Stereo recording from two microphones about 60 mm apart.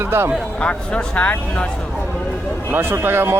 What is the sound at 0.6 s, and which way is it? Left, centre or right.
Speech, centre.